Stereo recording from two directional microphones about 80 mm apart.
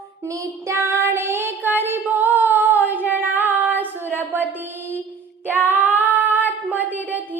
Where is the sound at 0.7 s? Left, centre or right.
Right.